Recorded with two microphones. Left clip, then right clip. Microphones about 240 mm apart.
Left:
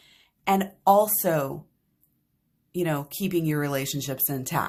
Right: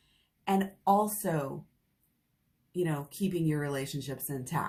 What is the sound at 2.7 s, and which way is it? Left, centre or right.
Speech, left.